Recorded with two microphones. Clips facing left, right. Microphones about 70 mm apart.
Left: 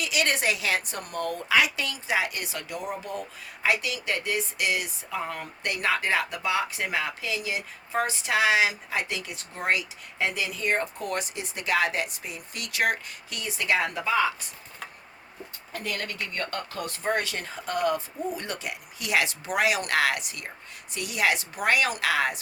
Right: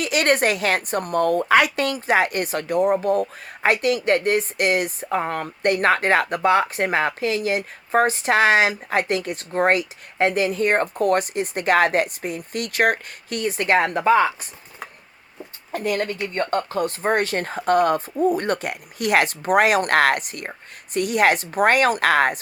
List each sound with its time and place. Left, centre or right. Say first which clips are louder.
0.0 s a woman's voice: right 7 dB; right
15.7 s speech: right 10 dB; right
16.2 s a woman's voice: right 9 dB; right